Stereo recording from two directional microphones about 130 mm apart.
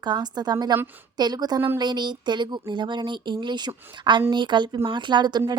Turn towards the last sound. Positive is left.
turn(degrees=-35)  # may be behind; listen again after turning